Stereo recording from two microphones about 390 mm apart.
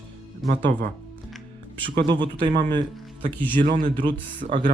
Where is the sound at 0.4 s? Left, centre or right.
Right.